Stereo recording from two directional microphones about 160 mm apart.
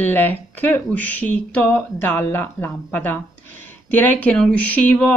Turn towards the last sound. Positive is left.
turn(degrees=10)  # may be behind; listen again after turning